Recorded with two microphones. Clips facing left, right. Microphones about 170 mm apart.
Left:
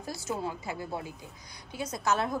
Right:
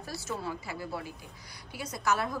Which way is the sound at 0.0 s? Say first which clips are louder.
Left 3 dB; 15° left (ahead or behind).